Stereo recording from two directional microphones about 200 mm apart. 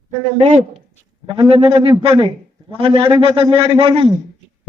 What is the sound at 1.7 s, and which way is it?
A man's voice, 25° right (ahead or behind).